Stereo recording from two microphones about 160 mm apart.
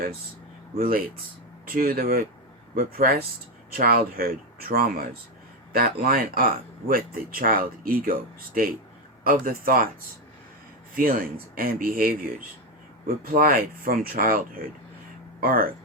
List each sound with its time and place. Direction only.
0.8 s speech: 65° right (ahead or behind)
10.9 s speech: 65° right (ahead or behind)
13.2 s speech: 65° right (ahead or behind)